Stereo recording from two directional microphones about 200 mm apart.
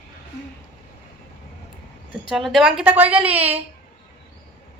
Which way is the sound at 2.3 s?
Centre (ahead or behind).